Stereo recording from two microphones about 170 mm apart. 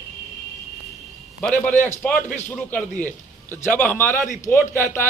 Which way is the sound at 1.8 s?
5° left (ahead or behind).